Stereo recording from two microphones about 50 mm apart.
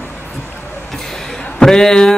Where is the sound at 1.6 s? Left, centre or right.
Centre.